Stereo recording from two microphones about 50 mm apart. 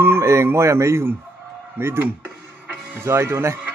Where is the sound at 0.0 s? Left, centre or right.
Right.